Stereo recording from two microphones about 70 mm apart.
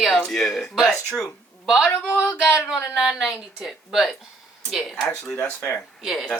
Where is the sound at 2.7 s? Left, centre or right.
Centre.